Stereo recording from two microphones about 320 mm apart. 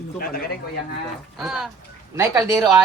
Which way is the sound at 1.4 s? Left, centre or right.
Centre.